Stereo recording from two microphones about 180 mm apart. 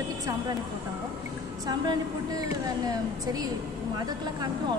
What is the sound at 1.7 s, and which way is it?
Speech, 25° right (ahead or behind).